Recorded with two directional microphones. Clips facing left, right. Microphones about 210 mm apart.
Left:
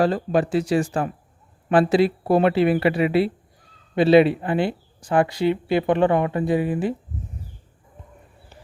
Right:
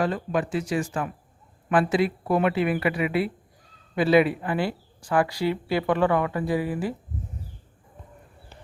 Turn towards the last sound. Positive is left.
turn(degrees=25)  # may be behind; listen again after turning